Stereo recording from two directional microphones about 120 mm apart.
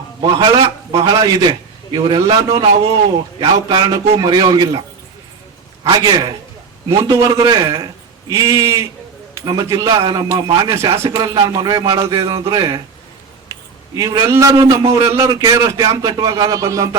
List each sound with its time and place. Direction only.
0.2 s a man's voice: 40° right (ahead or behind)
1.0 s a man's voice: 30° right (ahead or behind)
5.8 s a man's voice: 35° right (ahead or behind)
13.5 s a sound: 30° right (ahead or behind)
14.3 s a man's voice: 25° right (ahead or behind)